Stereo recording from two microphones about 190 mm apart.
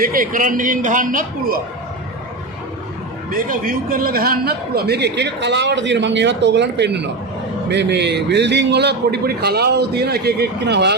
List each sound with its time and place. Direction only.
0.0 s a man's voice: 45° right (ahead or behind)
3.3 s a man's voice: 50° right (ahead or behind)